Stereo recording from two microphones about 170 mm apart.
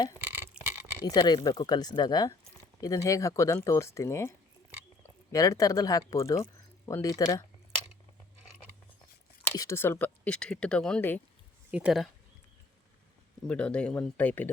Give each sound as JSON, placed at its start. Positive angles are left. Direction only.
{"t": 0.2, "sound": "a sound", "side_deg": -15}
{"t": 1.0, "sound": "speech", "side_deg": 25}
{"t": 9.6, "sound": "speech", "side_deg": 15}
{"t": 11.7, "sound": "speech", "side_deg": -5}
{"t": 13.5, "sound": "speech", "side_deg": 5}